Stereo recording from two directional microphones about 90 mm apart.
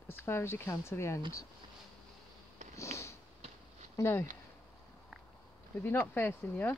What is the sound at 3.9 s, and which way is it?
Speech, 30° left (ahead or behind).